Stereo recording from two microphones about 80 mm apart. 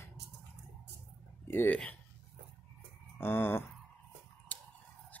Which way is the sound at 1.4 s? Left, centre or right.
Left.